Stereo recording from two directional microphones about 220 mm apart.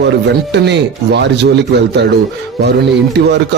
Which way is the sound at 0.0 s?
50° right (ahead or behind).